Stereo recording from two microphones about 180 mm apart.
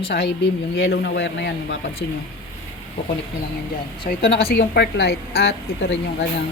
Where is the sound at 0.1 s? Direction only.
65° left (ahead or behind).